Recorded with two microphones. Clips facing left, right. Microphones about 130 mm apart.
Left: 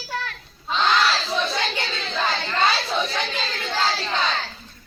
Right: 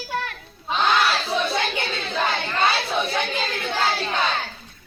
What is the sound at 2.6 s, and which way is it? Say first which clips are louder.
Chatter: right 1 dB; 60° right (ahead or behind).